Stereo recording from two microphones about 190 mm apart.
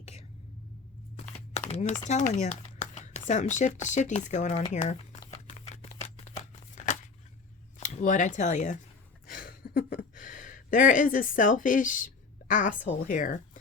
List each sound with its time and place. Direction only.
0.0 s vehicle: 35° left (ahead or behind)
1.7 s speech: 40° left (ahead or behind)
5.5 s a sound: 35° left (ahead or behind)
7.8 s speech: 40° left (ahead or behind)
9.3 s a sound: 50° left (ahead or behind)
13.0 s speech: 45° left (ahead or behind)